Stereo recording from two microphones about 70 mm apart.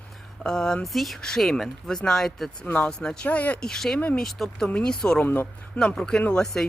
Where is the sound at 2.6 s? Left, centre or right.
Left.